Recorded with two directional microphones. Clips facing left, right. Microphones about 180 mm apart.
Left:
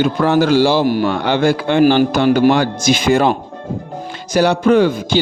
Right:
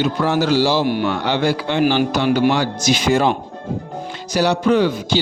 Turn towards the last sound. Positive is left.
turn(degrees=50)  # may be behind; listen again after turning